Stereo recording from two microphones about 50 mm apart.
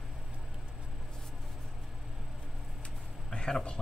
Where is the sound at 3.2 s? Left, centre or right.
Centre.